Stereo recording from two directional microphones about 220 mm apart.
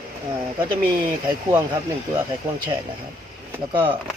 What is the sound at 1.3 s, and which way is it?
Speech, 15° right (ahead or behind).